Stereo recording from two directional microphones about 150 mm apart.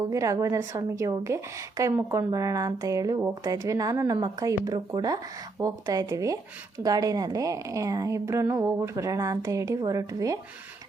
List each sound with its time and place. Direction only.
0.1 s speech: 20° right (ahead or behind)